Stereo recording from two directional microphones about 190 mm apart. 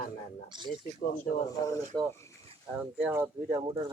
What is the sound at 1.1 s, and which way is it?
Speech, 40° left (ahead or behind).